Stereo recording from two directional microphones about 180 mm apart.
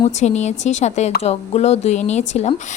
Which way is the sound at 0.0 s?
40° left (ahead or behind).